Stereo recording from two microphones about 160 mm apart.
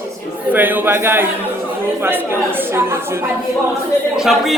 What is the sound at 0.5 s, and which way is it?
Speech, 10° right (ahead or behind).